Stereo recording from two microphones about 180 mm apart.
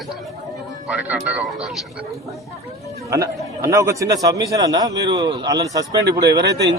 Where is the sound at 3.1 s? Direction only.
20° right (ahead or behind).